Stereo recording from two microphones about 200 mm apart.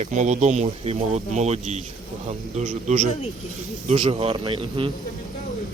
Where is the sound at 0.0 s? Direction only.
35° right (ahead or behind).